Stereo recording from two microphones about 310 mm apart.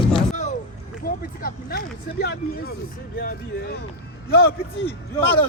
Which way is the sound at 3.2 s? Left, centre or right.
Left.